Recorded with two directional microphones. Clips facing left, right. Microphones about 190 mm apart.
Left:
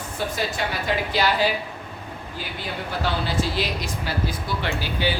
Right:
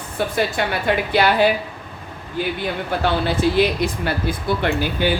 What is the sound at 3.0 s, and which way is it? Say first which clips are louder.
A woman's voice: right 6 dB; 60° right (ahead or behind).